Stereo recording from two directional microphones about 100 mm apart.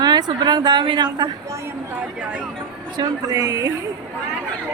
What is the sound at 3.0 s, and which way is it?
Speech, 35° right (ahead or behind).